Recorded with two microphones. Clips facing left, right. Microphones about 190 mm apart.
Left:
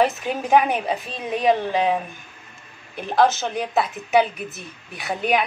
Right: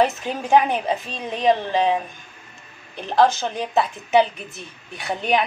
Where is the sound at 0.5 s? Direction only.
5° left (ahead or behind).